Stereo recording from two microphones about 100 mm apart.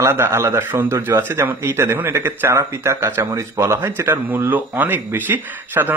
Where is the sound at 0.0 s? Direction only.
25° right (ahead or behind).